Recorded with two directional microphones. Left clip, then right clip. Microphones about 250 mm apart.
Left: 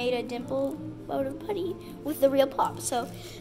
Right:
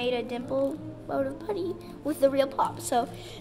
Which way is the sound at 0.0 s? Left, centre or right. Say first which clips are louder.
Even; centre.